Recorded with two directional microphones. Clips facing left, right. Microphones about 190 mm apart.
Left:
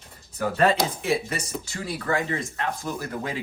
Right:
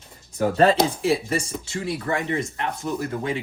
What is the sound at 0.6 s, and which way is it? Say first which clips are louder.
Speech: right 4 dB; 30° right (ahead or behind).